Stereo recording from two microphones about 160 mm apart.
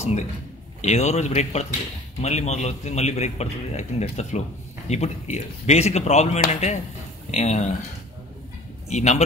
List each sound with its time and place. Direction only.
0.8 s a man's voice: 45° left (ahead or behind)
8.8 s speech: 45° left (ahead or behind)